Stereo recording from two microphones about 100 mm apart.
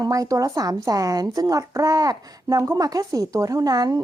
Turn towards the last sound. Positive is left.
turn(degrees=-40)  # may be behind; listen again after turning